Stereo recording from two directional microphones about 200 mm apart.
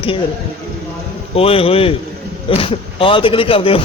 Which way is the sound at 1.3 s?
30° left (ahead or behind).